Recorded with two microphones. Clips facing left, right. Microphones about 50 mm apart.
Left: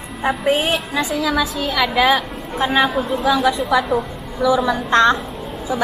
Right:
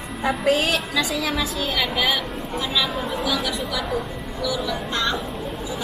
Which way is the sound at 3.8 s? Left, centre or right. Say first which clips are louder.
Left 5 dB; centre.